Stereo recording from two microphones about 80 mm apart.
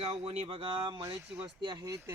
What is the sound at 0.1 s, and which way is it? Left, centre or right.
Speech, right.